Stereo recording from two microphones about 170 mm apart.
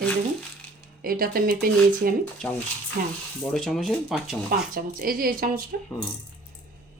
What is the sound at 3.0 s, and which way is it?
Speech, 55° right (ahead or behind).